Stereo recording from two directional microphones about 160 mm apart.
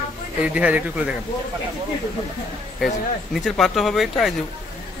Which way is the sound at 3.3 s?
Centre (ahead or behind).